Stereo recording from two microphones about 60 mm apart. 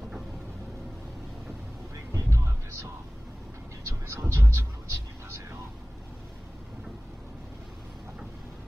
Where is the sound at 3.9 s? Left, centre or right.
Right.